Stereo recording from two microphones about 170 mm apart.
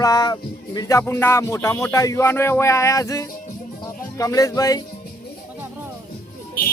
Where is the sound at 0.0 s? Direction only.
20° left (ahead or behind).